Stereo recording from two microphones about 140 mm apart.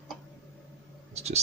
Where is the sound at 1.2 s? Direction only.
50° right (ahead or behind).